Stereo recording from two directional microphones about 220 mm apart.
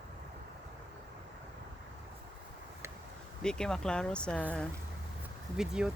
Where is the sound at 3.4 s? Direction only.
5° left (ahead or behind).